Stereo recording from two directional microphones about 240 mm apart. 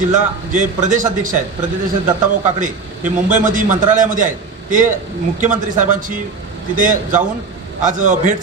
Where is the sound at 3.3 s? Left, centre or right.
Right.